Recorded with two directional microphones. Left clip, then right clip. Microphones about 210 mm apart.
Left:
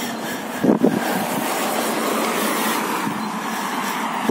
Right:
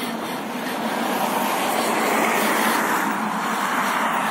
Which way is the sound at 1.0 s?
55° left (ahead or behind).